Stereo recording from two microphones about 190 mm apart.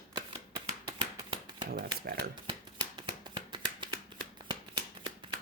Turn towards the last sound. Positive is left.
turn(degrees=-25)  # may be behind; listen again after turning